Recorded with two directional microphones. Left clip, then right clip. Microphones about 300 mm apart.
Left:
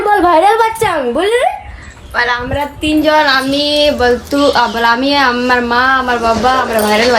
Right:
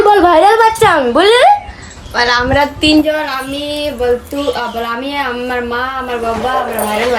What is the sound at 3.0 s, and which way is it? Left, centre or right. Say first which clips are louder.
Speech: left 5 dB; centre.